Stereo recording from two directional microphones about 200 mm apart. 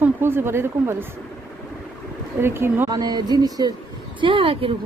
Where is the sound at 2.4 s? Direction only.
10° right (ahead or behind); by 4.7 s 25° right (ahead or behind).